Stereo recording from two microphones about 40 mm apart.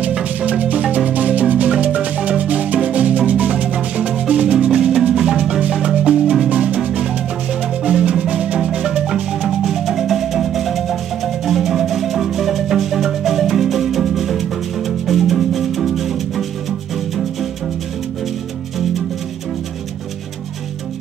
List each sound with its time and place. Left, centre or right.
0.2 s music: right
4.3 s marimba: right
5.1 s music: centre
5.7 s marimba: right
6.4 s music: right
7.8 s marimba: right
9.6 s marimba: centre
14.9 s music: centre